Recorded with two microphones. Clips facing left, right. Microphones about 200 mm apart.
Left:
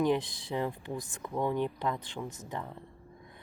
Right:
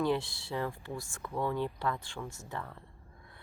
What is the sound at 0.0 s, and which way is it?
Speech, 15° left (ahead or behind).